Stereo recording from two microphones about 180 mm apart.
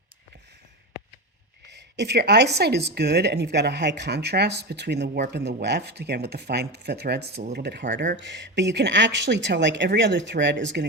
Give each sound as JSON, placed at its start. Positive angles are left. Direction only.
{"t": 1.6, "sound": "a woman's voice", "side_deg": -70}
{"t": 8.1, "sound": "speech", "side_deg": -80}